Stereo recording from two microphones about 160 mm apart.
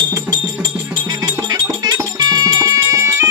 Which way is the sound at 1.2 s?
20° right (ahead or behind).